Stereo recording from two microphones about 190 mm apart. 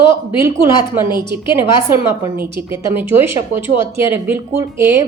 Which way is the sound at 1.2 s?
15° right (ahead or behind).